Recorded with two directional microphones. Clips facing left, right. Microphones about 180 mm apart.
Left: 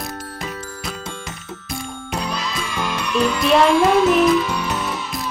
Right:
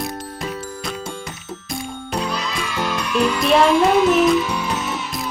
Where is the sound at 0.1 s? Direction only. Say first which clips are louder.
Right 2 dB; 10° right (ahead or behind).